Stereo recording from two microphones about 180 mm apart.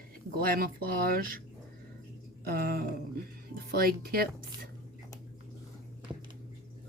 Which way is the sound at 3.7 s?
55° right (ahead or behind).